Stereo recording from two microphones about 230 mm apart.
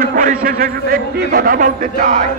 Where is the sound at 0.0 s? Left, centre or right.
Right.